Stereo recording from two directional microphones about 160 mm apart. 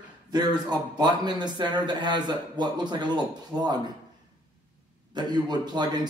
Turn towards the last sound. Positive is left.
turn(degrees=-25)  # may be behind; listen again after turning